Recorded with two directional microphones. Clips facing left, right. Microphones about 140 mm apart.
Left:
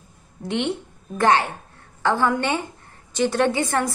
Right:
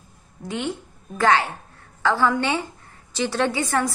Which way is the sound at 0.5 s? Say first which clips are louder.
Left 3 dB; 70° left (ahead or behind).